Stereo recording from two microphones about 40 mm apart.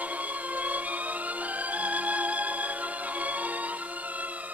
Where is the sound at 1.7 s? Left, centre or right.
Right.